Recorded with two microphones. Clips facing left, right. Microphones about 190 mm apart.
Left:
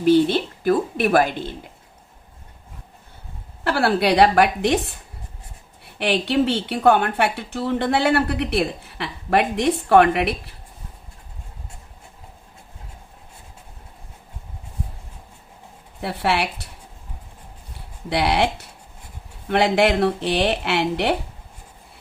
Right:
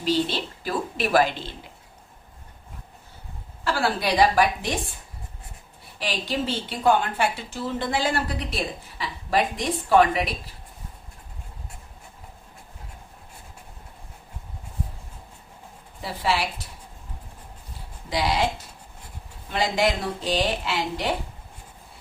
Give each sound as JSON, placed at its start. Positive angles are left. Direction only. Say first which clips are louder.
{"t": 0.0, "sound": "a woman's voice", "louder": "left 8 dB", "side_deg": 55}
{"t": 3.6, "sound": "a woman's voice", "louder": "left 6 dB", "side_deg": 65}
{"t": 6.0, "sound": "a woman's voice", "louder": "left 8 dB", "side_deg": 65}
{"t": 16.0, "sound": "a woman's voice", "louder": "left 3 dB", "side_deg": 65}
{"t": 18.1, "sound": "a woman's voice", "louder": "left 4 dB", "side_deg": 65}